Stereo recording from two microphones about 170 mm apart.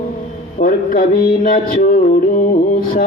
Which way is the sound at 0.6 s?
55° left (ahead or behind).